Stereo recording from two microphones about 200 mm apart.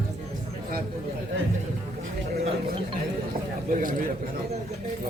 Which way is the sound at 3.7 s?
45° right (ahead or behind).